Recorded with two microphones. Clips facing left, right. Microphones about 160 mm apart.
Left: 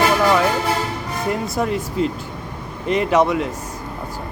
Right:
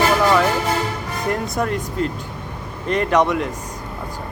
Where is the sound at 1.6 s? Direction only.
Centre (ahead or behind).